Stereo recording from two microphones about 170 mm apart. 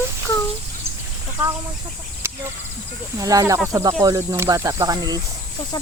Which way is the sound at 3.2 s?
20° right (ahead or behind).